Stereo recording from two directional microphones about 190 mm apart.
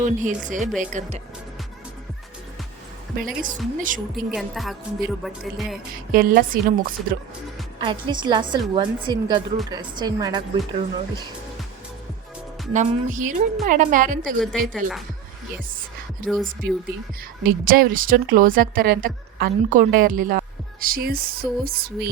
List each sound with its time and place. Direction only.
0.0 s speech: 40° right (ahead or behind)
3.2 s a woman's voice: 45° right (ahead or behind)
4.3 s music: centre (ahead or behind)
6.1 s a woman's voice: 50° right (ahead or behind)
7.8 s a woman's voice: 25° right (ahead or behind)
12.7 s a woman's voice: 40° right (ahead or behind)
14.3 s music: centre (ahead or behind)
16.2 s music: 5° left (ahead or behind)
17.4 s a woman's voice: 50° right (ahead or behind)